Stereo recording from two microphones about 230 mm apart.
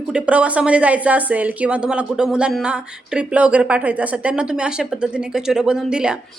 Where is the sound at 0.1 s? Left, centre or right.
Centre.